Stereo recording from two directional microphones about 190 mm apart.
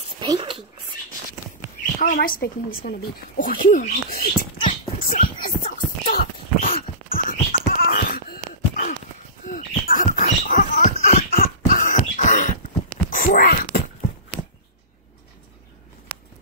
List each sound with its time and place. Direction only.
0.2 s whispering: 25° right (ahead or behind)
2.0 s dog: 50° left (ahead or behind)
13.1 s wail: 45° left (ahead or behind)